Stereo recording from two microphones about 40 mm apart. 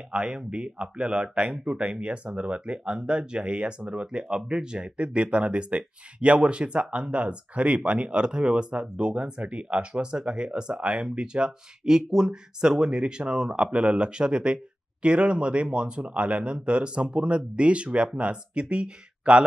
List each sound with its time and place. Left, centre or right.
0.1 s speech: right